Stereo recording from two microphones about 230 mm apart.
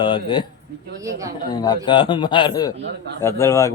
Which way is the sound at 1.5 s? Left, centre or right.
Centre.